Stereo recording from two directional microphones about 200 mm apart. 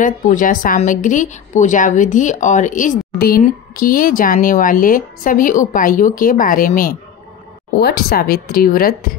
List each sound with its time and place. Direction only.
0.0 s a woman's voice: 40° left (ahead or behind)